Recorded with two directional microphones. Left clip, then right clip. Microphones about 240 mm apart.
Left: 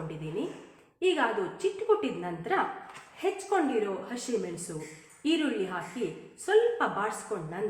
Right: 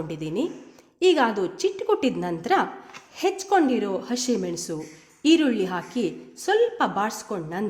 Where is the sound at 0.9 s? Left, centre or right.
Right.